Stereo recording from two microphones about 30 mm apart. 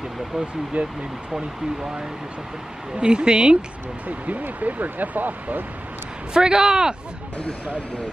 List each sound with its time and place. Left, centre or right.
0.8 s speech: right
3.0 s speech: right
4.3 s speech: right
6.3 s speech: right